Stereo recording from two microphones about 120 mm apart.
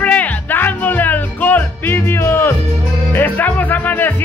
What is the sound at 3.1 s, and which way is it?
Speech, 15° left (ahead or behind).